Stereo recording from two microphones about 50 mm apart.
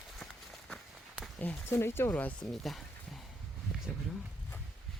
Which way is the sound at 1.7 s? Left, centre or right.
Left.